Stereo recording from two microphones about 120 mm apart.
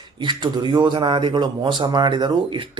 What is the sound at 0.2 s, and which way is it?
Speech, 35° right (ahead or behind).